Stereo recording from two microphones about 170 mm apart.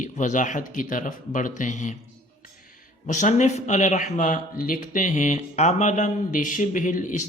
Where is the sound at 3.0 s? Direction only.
45° left (ahead or behind).